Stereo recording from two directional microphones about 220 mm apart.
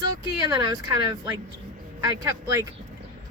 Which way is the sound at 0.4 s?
20° right (ahead or behind).